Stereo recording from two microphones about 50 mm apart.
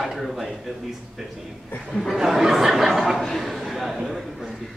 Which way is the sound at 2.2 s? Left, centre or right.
Centre.